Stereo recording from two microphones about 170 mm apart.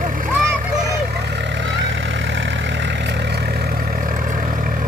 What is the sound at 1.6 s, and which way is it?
Vehicle, 90° right.